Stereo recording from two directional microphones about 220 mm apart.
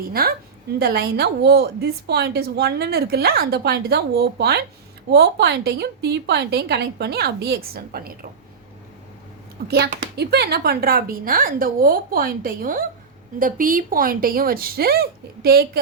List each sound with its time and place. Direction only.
0.1 s a woman's voice: 45° right (ahead or behind)
9.6 s speech: 45° right (ahead or behind)